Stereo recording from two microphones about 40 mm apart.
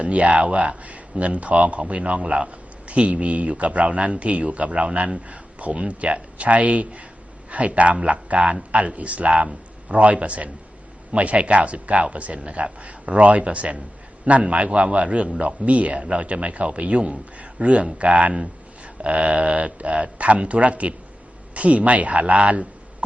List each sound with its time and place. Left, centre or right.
0.0 s a man's voice: right